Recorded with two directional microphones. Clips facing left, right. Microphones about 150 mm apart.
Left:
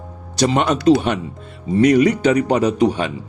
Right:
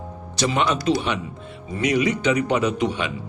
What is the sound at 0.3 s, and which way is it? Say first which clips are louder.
Speech: left 5 dB; 40° left (ahead or behind).